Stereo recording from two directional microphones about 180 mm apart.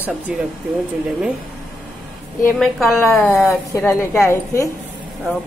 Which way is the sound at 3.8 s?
15° left (ahead or behind).